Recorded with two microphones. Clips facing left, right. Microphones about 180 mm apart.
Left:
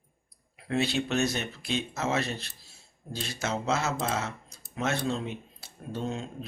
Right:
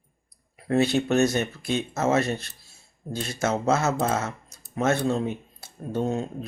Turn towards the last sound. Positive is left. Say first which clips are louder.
# right 7 dB
turn(degrees=-45)  # may be behind; listen again after turning